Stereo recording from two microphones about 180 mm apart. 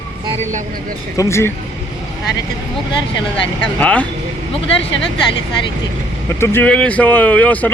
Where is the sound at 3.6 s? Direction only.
5° left (ahead or behind).